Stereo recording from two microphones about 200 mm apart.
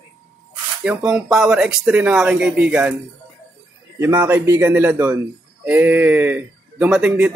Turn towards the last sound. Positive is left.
turn(degrees=-5)  # may be behind; listen again after turning